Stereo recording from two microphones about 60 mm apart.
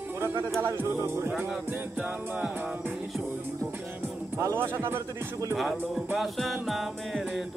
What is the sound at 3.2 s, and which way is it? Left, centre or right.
Music, right.